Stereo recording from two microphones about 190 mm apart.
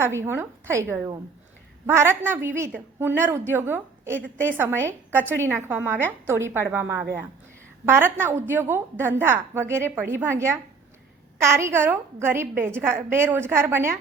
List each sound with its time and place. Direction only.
0.0 s a woman's voice: 15° right (ahead or behind)